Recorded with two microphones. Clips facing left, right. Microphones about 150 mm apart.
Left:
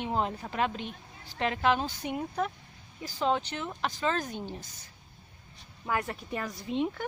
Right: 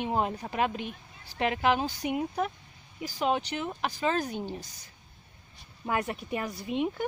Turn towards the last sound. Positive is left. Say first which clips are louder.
# right 1 dB
turn(degrees=-15)  # may be behind; listen again after turning